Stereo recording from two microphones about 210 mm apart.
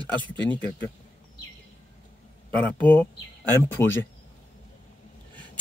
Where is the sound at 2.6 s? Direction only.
5° left (ahead or behind).